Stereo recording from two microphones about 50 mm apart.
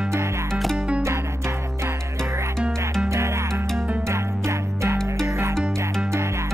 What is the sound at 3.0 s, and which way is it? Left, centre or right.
Music, right.